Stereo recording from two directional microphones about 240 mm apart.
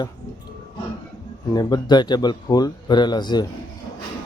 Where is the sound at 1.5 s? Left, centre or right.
Centre.